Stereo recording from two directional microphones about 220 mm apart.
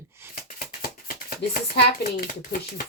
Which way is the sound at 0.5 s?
40° left (ahead or behind).